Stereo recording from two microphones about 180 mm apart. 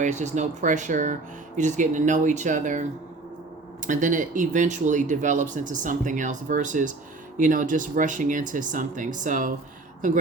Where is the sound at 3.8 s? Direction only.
45° right (ahead or behind).